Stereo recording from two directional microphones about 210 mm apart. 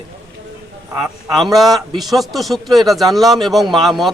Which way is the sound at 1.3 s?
Centre (ahead or behind).